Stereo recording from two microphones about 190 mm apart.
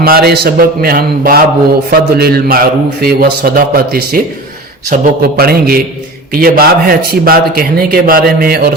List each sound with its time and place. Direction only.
0.0 s speech: 55° right (ahead or behind)